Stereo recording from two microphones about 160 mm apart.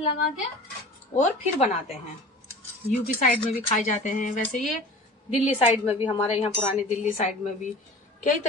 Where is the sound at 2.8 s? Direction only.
60° left (ahead or behind).